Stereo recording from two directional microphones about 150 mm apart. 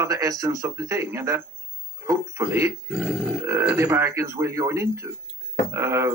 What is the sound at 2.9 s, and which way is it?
Grunt, 5° right (ahead or behind).